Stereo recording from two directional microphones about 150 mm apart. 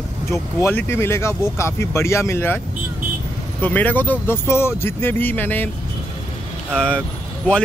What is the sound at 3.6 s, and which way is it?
Speech, 10° left (ahead or behind).